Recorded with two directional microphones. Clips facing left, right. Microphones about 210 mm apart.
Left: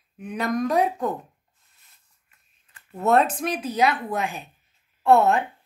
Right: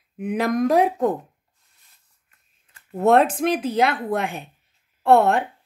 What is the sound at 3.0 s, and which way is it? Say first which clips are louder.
A woman's voice: right 4 dB; 60° right (ahead or behind).